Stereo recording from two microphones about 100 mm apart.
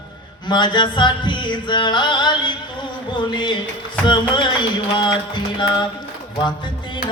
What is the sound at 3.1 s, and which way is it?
Music, 50° left (ahead or behind).